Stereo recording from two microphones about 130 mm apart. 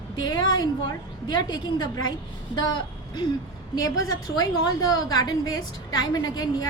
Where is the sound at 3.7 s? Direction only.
25° left (ahead or behind).